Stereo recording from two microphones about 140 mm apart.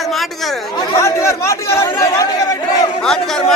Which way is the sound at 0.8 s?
20° left (ahead or behind).